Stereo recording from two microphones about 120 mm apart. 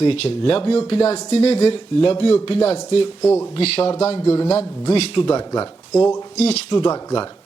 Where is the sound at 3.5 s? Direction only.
55° left (ahead or behind); by 6.2 s 30° left (ahead or behind).